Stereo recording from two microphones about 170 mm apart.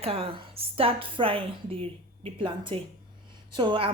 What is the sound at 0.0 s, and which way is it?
A woman's voice, 35° right (ahead or behind).